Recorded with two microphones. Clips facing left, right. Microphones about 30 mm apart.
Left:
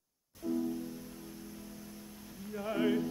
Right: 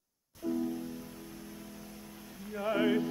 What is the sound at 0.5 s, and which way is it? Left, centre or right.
Music, centre.